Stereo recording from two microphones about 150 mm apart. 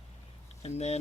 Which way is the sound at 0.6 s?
45° left (ahead or behind).